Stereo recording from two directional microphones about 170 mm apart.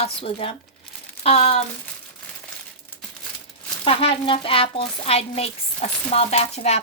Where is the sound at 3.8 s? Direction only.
35° left (ahead or behind).